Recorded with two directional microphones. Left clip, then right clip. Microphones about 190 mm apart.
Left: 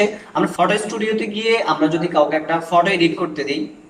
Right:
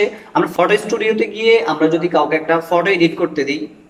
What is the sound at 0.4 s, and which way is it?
Speech, 45° right (ahead or behind).